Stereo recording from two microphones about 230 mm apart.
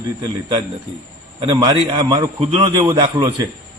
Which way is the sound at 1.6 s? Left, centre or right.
Right.